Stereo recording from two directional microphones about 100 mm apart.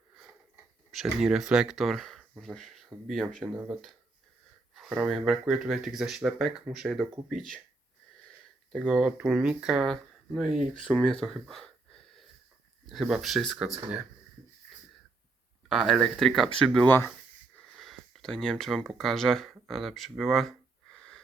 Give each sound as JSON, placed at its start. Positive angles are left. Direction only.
{"t": 1.2, "sound": "speech", "side_deg": -5}
{"t": 4.9, "sound": "speech", "side_deg": -10}
{"t": 8.8, "sound": "speech", "side_deg": -10}
{"t": 15.7, "sound": "speech", "side_deg": 0}
{"t": 16.8, "sound": "speech", "side_deg": 20}
{"t": 17.7, "sound": "a sound", "side_deg": 0}
{"t": 18.9, "sound": "speech", "side_deg": 5}